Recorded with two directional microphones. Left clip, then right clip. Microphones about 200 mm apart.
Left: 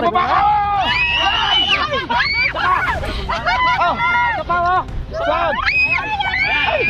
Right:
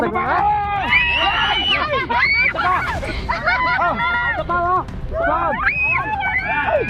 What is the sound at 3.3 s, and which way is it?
Bow-wow, 75° left (ahead or behind).